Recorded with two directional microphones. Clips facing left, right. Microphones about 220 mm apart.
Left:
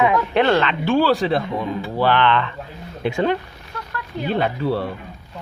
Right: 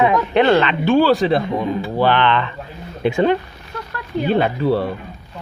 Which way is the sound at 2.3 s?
5° right (ahead or behind).